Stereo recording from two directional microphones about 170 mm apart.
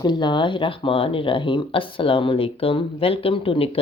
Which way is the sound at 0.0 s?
25° left (ahead or behind).